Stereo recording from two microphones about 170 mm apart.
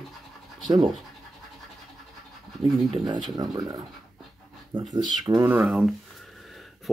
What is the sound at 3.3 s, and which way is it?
Speech, 25° right (ahead or behind).